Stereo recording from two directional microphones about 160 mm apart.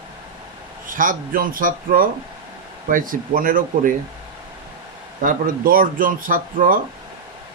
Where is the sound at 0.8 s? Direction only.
55° right (ahead or behind).